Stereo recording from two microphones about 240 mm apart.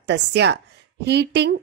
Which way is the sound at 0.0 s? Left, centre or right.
Right.